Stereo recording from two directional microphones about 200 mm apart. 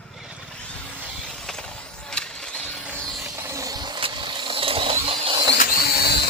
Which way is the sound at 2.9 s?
10° right (ahead or behind).